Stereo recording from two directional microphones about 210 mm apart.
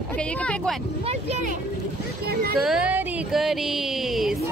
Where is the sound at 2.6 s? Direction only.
5° right (ahead or behind).